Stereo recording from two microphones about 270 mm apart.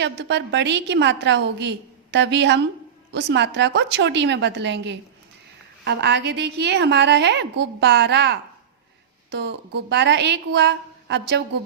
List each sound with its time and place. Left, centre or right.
0.0 s a woman's voice: right